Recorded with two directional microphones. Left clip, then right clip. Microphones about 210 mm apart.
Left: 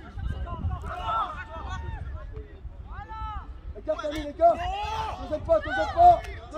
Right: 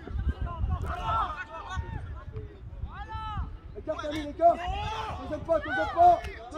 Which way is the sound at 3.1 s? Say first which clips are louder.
Left 1 dB; 35° right (ahead or behind).